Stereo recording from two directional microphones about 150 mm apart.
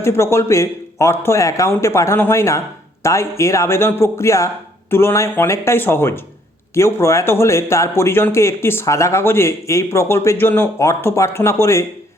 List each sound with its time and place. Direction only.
0.0 s speech: 15° left (ahead or behind)